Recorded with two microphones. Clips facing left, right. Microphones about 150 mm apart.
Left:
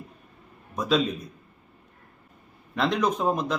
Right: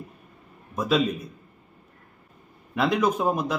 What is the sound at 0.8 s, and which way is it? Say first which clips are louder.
Speech: right 1 dB; 5° right (ahead or behind).